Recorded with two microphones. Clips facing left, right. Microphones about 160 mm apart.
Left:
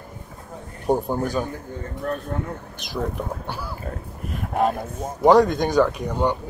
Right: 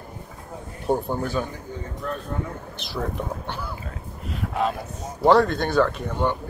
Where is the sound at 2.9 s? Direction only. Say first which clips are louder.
Left 2 dB; 10° left (ahead or behind).